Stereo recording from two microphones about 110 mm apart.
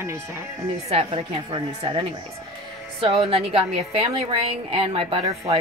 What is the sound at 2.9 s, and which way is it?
A woman's voice, 60° right (ahead or behind).